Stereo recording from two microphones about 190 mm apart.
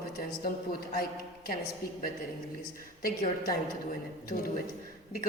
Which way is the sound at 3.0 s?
50° left (ahead or behind).